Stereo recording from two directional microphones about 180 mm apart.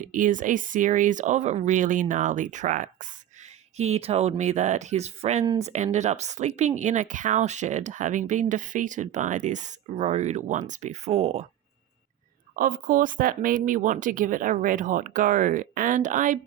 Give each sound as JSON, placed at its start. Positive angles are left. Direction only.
{"t": 0.0, "sound": "speech", "side_deg": -45}
{"t": 12.5, "sound": "speech", "side_deg": -50}